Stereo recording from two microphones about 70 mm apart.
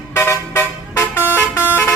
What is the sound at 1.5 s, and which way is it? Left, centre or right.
Vehicle, left.